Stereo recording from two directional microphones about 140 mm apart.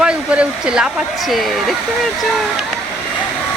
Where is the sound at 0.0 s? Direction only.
5° right (ahead or behind).